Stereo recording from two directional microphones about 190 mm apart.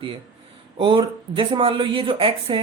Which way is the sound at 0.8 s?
25° right (ahead or behind).